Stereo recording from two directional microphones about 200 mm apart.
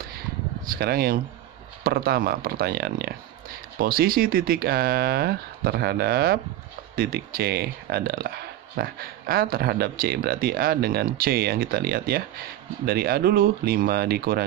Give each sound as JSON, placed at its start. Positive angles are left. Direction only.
{"t": 0.7, "sound": "speech", "side_deg": -50}